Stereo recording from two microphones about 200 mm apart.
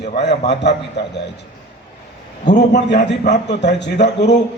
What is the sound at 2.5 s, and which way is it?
A man's voice, 60° left (ahead or behind).